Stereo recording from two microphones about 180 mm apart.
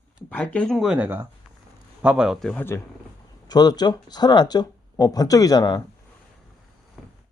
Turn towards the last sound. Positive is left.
turn(degrees=0)  # may be behind; listen again after turning